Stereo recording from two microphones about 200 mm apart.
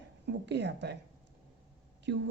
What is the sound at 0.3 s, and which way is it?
Speech, 60° right (ahead or behind).